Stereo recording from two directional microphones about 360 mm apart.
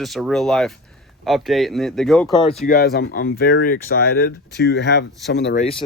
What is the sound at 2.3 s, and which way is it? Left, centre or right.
Speech, centre.